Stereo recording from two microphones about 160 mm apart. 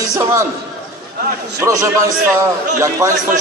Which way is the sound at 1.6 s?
20° right (ahead or behind).